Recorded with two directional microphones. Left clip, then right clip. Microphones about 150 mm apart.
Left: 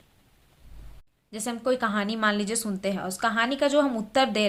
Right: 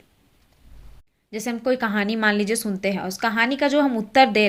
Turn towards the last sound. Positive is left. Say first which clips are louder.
# right 7 dB
turn(degrees=-20)  # may be behind; listen again after turning